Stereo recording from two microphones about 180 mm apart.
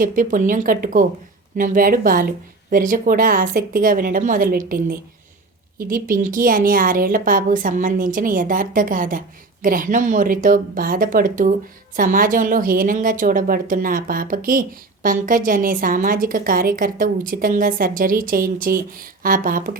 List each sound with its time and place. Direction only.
0.0 s a woman's voice: 50° right (ahead or behind)